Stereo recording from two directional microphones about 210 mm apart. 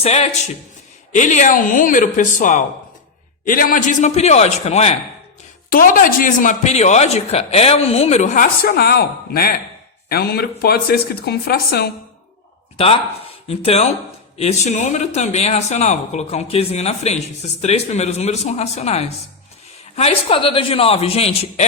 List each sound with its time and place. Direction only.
0.0 s speech: 30° left (ahead or behind)
5.7 s a woman's voice: 40° left (ahead or behind)
12.7 s a man's voice: 25° left (ahead or behind)